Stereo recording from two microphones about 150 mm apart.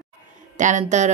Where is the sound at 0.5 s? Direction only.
55° right (ahead or behind).